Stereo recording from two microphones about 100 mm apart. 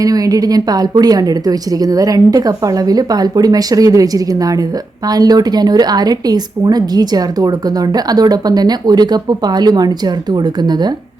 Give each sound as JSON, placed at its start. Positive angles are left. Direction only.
{"t": 0.0, "sound": "a woman's voice", "side_deg": -35}